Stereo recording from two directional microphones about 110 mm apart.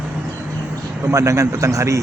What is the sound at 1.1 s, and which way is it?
Speech, 25° right (ahead or behind).